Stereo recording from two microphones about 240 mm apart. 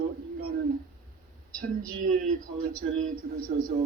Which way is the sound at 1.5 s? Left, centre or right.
Right.